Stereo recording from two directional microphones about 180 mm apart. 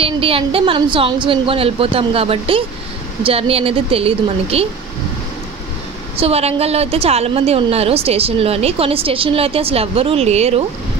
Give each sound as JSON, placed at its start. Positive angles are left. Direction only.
{"t": 0.0, "sound": "a woman's voice", "side_deg": -30}
{"t": 6.1, "sound": "a woman's voice", "side_deg": -35}